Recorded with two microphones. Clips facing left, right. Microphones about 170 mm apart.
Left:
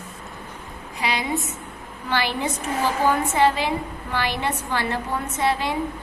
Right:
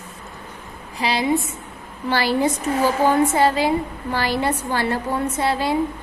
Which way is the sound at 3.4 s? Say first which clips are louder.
Right 2 dB; 35° right (ahead or behind).